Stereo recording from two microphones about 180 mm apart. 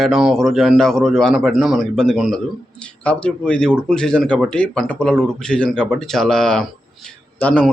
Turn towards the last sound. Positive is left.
turn(degrees=10)  # may be behind; listen again after turning